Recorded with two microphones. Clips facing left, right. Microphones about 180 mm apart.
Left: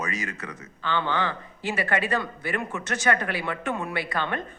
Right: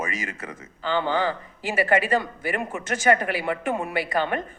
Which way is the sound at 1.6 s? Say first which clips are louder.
Right 4 dB; 10° right (ahead or behind).